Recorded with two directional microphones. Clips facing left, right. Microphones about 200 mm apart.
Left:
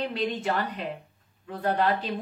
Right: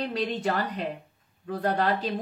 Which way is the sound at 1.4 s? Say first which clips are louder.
Right 1 dB; 40° right (ahead or behind).